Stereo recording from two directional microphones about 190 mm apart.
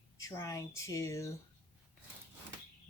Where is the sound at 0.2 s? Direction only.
15° left (ahead or behind).